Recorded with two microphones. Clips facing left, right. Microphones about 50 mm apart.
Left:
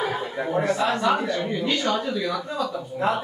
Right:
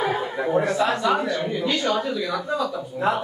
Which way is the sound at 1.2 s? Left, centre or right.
Centre.